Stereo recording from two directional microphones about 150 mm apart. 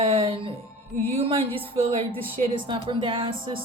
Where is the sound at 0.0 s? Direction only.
40° right (ahead or behind).